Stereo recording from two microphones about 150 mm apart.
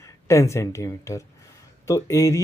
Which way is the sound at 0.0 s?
20° left (ahead or behind).